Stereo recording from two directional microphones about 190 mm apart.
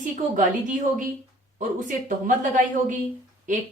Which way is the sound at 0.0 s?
45° right (ahead or behind).